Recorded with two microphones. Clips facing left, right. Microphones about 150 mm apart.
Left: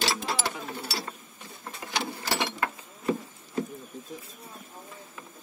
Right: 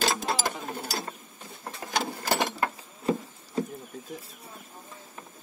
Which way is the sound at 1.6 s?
45° right (ahead or behind).